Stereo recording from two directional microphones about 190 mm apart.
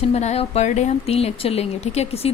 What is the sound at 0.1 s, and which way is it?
Speech, 35° left (ahead or behind).